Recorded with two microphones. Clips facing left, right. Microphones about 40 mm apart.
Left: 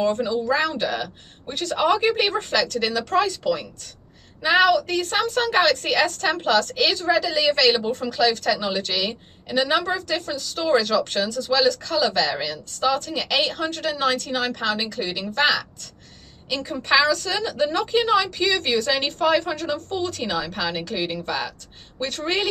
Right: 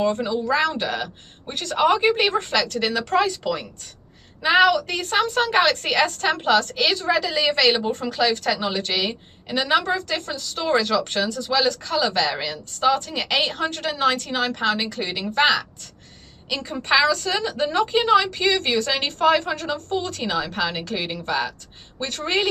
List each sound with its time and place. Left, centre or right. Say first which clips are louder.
0.0 s a woman's voice: even; centre
1.5 s a woman's voice: left 2 dB; right
1.8 s a woman's voice: right 2 dB; right
2.8 s a woman's voice: right 1 dB; centre
5.1 s a woman's voice: right 2 dB; centre
7.8 s a woman's voice: left 1 dB; centre
9.6 s a woman's voice: right 1 dB; centre
9.9 s a woman's voice: even; right; by 22.5 s centre